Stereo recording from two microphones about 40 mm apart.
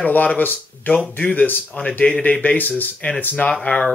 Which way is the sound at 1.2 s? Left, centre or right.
Left.